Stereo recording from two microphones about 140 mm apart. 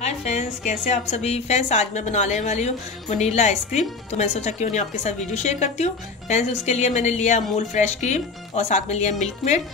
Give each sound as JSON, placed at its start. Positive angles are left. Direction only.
{"t": 0.0, "sound": "a woman's voice", "side_deg": 50}